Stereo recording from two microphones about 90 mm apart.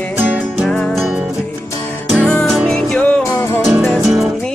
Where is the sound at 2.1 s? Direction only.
10° left (ahead or behind).